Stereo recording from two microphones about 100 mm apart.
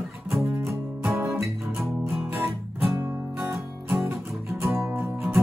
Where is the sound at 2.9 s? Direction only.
25° right (ahead or behind).